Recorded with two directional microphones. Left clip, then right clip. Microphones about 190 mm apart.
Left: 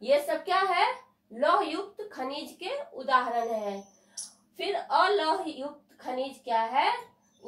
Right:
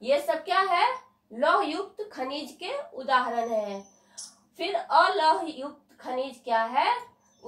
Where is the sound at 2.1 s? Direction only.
15° right (ahead or behind).